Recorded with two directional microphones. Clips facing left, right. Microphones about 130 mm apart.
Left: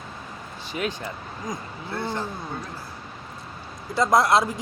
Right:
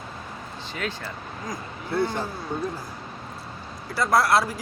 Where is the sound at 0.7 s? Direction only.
15° left (ahead or behind).